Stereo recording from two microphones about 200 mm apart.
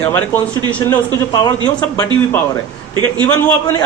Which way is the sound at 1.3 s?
20° left (ahead or behind).